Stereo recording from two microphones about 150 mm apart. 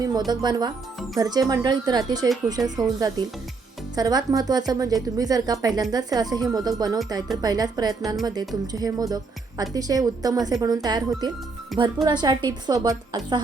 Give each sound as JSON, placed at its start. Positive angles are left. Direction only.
{"t": 0.3, "sound": "a woman's voice", "side_deg": -30}
{"t": 2.6, "sound": "speech", "side_deg": 0}
{"t": 3.0, "sound": "a woman's voice", "side_deg": -25}
{"t": 11.7, "sound": "speech", "side_deg": 0}
{"t": 12.0, "sound": "a woman's voice", "side_deg": -30}